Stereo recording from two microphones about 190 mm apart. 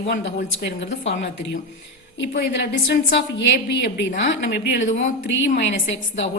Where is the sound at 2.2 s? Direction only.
65° left (ahead or behind).